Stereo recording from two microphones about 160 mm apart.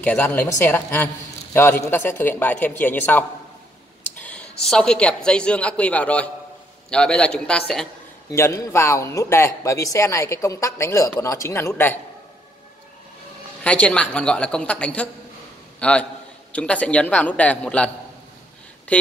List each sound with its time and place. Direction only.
0.0 s a woman's voice: 10° left (ahead or behind)
8.3 s speech: 20° left (ahead or behind)
13.7 s speech: 5° left (ahead or behind)